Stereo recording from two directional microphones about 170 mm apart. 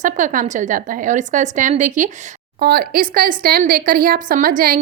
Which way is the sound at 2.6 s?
65° right (ahead or behind).